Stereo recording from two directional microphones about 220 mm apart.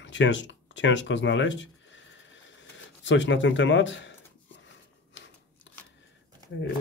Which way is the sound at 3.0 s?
55° left (ahead or behind).